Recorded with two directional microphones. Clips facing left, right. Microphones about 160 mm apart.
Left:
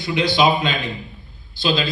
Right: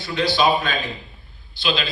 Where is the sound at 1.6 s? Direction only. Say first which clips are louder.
Left 4 dB; 35° left (ahead or behind).